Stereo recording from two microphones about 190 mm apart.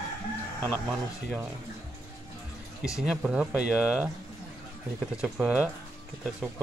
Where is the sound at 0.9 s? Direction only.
5° right (ahead or behind).